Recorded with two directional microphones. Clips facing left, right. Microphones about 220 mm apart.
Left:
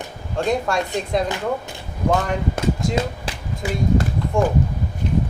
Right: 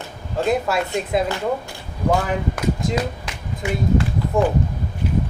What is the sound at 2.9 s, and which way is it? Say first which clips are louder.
Speech: even; 35° left (ahead or behind).